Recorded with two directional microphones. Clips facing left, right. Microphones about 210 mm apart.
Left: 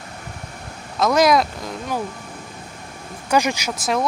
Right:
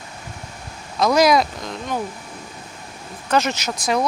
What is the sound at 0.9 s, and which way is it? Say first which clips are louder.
Speech: even; centre (ahead or behind).